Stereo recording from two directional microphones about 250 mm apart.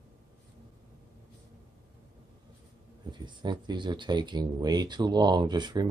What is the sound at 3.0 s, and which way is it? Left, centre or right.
Speech, centre.